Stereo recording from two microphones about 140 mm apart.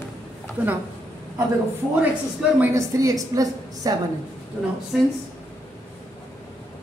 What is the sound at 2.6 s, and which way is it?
A woman's voice, 20° right (ahead or behind).